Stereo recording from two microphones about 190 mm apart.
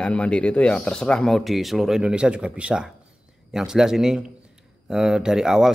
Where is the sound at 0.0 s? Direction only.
5° left (ahead or behind).